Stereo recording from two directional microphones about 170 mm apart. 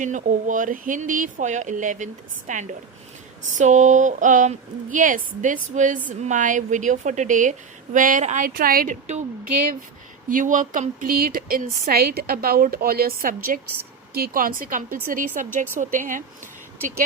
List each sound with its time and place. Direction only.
0.0 s speech: 50° right (ahead or behind)